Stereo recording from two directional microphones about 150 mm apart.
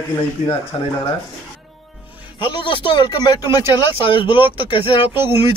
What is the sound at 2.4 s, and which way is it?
Speech, 35° left (ahead or behind).